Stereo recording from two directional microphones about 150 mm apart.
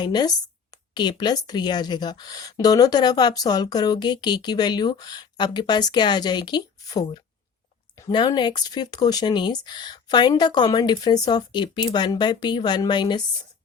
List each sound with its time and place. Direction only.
0.0 s a woman's voice: 30° left (ahead or behind)